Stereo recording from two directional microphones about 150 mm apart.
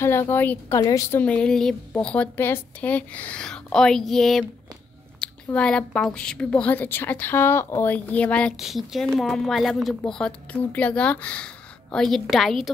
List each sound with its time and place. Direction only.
0.0 s a woman's voice: 15° left (ahead or behind)
0.7 s a woman's voice: 30° left (ahead or behind)
1.1 s a woman's voice: 10° left (ahead or behind)